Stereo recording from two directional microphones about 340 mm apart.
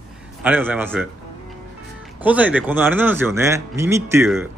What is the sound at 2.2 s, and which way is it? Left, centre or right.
Speech, centre.